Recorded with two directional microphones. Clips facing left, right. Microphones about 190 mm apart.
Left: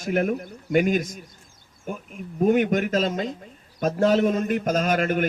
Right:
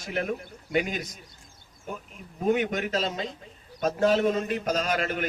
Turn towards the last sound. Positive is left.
turn(degrees=50)  # may be behind; listen again after turning